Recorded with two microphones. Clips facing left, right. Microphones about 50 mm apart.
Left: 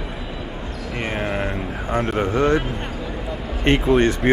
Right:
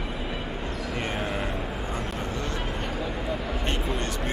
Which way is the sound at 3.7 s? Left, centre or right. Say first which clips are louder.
Left 16 dB; left.